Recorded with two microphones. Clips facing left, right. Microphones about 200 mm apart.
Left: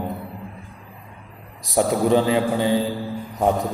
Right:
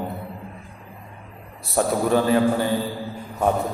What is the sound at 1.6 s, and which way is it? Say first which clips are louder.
A man's voice: left 2 dB; 15° left (ahead or behind).